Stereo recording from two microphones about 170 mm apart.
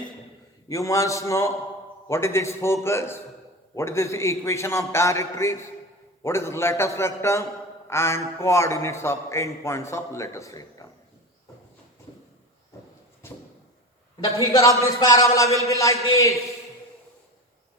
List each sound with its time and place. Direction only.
0.7 s a man's voice: 20° left (ahead or behind)
14.3 s a man's voice: 20° left (ahead or behind)